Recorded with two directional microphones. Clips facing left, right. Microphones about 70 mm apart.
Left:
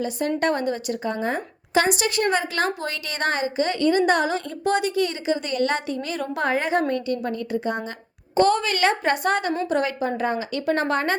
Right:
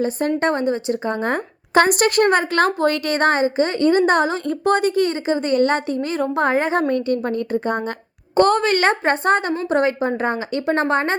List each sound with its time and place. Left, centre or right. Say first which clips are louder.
0.0 s a woman's voice: right 4 dB; right
1.2 s a woman's voice: right 4 dB; right